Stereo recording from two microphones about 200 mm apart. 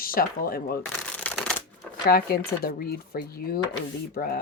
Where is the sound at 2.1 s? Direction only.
50° left (ahead or behind).